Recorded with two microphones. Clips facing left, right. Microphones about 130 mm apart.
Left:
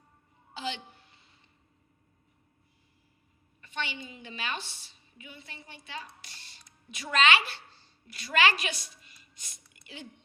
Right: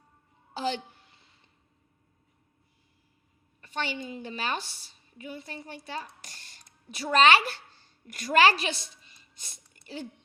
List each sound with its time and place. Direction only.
0.5 s a woman's voice: 40° right (ahead or behind)
3.6 s a woman's voice: 40° right (ahead or behind)